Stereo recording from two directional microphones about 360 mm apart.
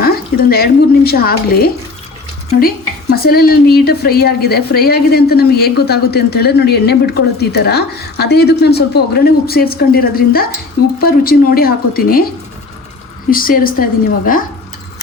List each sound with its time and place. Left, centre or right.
0.0 s speech: left
13.3 s speech: left